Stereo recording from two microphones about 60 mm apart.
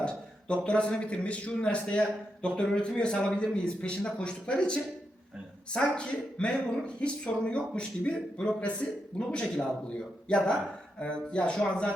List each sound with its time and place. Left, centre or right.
0.0 s a man's voice: centre